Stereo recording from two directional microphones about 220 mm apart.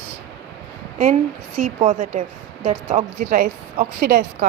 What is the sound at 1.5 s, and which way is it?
Speech, 35° right (ahead or behind).